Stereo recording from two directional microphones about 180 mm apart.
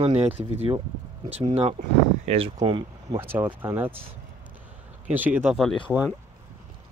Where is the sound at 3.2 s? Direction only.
10° right (ahead or behind).